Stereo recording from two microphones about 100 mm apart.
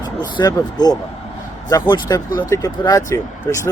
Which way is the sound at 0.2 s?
45° left (ahead or behind).